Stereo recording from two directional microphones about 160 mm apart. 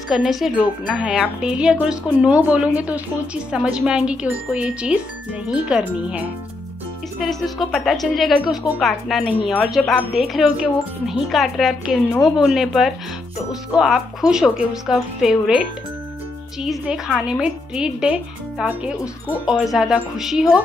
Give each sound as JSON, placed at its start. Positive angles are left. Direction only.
{"t": 0.1, "sound": "speech", "side_deg": 0}
{"t": 16.6, "sound": "speech", "side_deg": 0}